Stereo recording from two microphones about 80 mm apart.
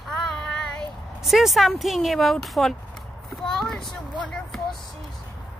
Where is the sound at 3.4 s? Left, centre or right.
Centre.